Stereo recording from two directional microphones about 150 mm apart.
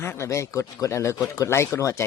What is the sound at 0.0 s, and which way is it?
A man's voice, 15° left (ahead or behind).